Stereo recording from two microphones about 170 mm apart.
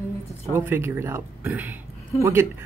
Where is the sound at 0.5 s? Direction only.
15° right (ahead or behind).